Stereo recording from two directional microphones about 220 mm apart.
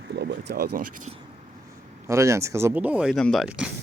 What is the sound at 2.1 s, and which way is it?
Speech, 15° right (ahead or behind).